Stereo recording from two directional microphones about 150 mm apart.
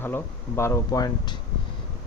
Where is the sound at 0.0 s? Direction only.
15° left (ahead or behind).